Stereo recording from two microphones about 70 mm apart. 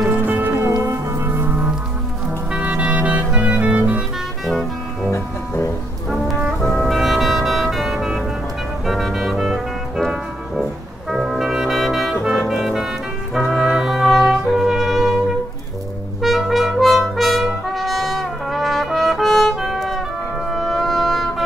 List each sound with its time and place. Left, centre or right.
0.1 s music: right
2.5 s music: centre
4.5 s music: centre
10.0 s brass instrument: centre
16.2 s music: centre
17.7 s trumpet: centre
20.5 s music: centre